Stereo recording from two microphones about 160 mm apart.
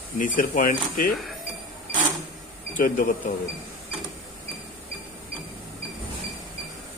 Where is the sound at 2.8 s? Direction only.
55° left (ahead or behind).